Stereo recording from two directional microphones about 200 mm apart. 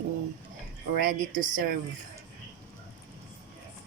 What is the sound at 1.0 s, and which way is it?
Speech, 40° right (ahead or behind).